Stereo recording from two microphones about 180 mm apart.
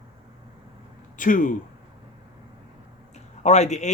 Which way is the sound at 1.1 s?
45° left (ahead or behind).